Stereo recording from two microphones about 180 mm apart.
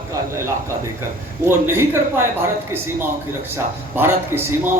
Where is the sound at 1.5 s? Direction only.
15° right (ahead or behind).